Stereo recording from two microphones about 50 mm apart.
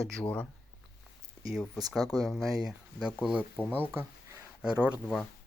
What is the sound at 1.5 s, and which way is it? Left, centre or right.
Speech, centre.